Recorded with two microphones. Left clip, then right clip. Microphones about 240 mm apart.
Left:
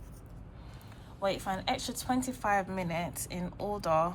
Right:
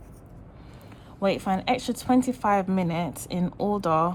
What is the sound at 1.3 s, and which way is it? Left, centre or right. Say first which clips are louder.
A woman's voice: right 8 dB; right.